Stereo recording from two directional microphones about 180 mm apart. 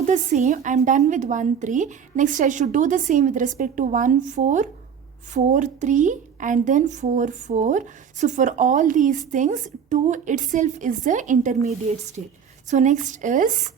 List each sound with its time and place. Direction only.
0.1 s a woman's voice: 40° right (ahead or behind)